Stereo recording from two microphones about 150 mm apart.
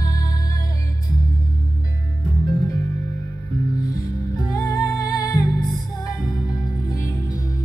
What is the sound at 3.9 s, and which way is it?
Music, 20° left (ahead or behind).